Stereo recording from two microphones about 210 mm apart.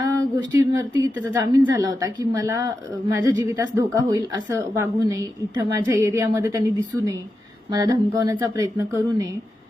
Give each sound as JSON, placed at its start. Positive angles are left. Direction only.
{"t": 0.0, "sound": "a woman's voice", "side_deg": -15}